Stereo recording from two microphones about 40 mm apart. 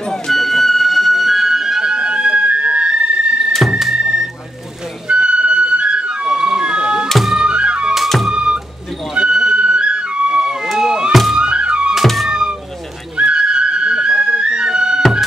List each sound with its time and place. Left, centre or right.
0.1 s music: centre; by 7.1 s right
7.1 s music: centre
7.3 s music: right
11.1 s music: centre
11.3 s music: right
12.3 s vehicle: right
13.2 s music: right